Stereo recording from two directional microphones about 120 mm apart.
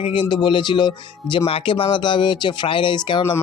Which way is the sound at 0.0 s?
45° left (ahead or behind).